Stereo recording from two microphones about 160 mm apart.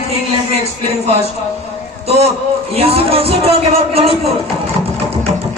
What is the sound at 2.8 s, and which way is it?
Speech, 40° right (ahead or behind).